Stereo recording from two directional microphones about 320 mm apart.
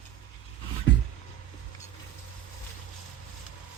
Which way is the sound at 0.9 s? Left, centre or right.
Left.